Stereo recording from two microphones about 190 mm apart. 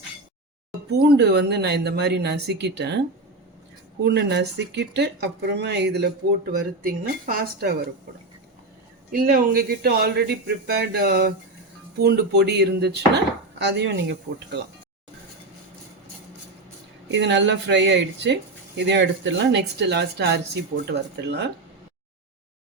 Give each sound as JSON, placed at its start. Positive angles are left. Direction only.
{"t": 0.9, "sound": "speech", "side_deg": -60}
{"t": 4.0, "sound": "speech", "side_deg": -60}
{"t": 9.1, "sound": "speech", "side_deg": -50}
{"t": 17.1, "sound": "speech", "side_deg": -70}